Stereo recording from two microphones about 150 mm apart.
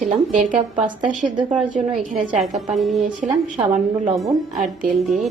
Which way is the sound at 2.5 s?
Centre (ahead or behind).